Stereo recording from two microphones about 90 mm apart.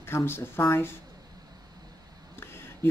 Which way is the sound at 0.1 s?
30° left (ahead or behind).